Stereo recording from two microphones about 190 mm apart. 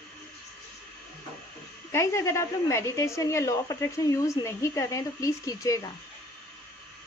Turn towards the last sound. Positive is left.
turn(degrees=15)  # may be behind; listen again after turning